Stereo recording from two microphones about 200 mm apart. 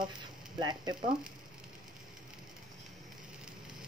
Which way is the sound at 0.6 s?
20° right (ahead or behind).